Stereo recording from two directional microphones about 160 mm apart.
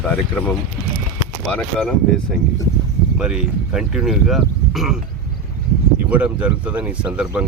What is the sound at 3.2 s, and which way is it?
Speech, 5° right (ahead or behind).